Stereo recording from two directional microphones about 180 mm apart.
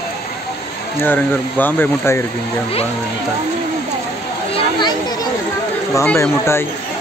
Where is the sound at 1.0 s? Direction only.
10° left (ahead or behind).